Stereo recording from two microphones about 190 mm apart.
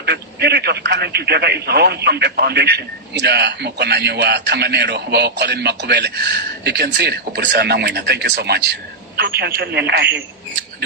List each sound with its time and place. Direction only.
0.0 s speech: 60° right (ahead or behind)